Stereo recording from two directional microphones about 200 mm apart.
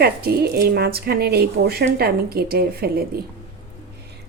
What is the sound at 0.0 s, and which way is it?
Speech, 50° right (ahead or behind).